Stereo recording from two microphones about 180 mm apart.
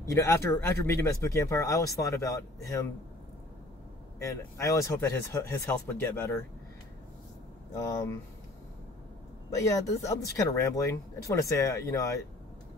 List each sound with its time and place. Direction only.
0.1 s speech: 15° left (ahead or behind)
4.2 s speech: 15° left (ahead or behind)
7.7 s speech: 20° left (ahead or behind)
9.6 s speech: 20° left (ahead or behind)